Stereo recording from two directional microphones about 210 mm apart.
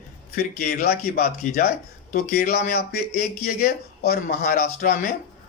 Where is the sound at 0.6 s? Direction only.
45° left (ahead or behind).